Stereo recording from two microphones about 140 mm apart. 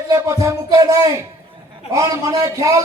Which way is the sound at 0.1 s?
25° right (ahead or behind).